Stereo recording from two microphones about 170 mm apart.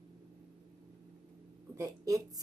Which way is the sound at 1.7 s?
20° right (ahead or behind).